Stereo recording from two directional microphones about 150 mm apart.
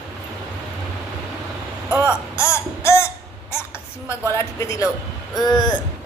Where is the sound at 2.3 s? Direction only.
20° left (ahead or behind).